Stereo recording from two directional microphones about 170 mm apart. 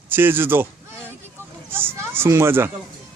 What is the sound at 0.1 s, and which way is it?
Speech, 10° right (ahead or behind).